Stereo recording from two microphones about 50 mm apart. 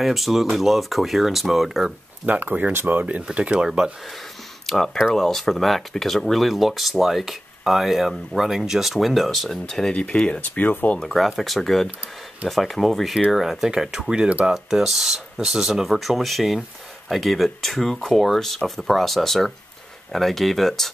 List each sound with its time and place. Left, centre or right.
0.0 s speech: centre
2.2 s speech: right
2.7 s speech: right
3.2 s speech: right
4.6 s speech: centre
10.4 s speech: left
11.0 s speech: centre